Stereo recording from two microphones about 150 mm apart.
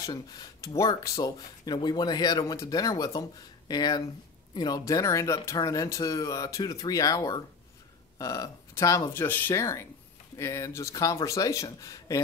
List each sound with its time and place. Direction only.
0.0 s speech: 25° left (ahead or behind)